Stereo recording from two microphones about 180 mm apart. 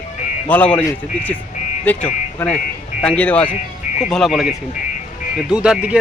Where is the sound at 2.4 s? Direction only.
10° left (ahead or behind).